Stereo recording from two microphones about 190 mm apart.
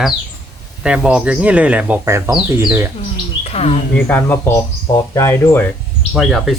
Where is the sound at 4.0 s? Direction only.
10° left (ahead or behind).